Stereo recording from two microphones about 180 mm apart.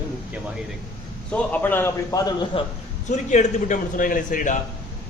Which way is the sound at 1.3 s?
10° left (ahead or behind).